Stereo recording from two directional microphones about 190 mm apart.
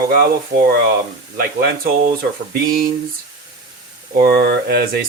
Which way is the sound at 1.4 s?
50° right (ahead or behind).